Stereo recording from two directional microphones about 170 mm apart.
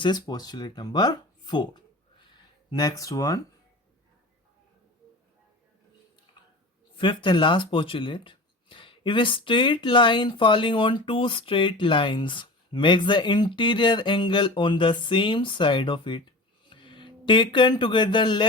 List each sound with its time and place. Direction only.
0.0 s speech: 25° left (ahead or behind)
6.9 s speech: 30° left (ahead or behind)